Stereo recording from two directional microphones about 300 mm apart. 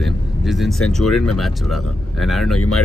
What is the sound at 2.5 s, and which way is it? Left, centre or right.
Speech, left.